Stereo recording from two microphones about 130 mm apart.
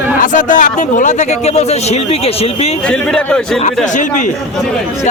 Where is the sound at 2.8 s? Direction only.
5° left (ahead or behind).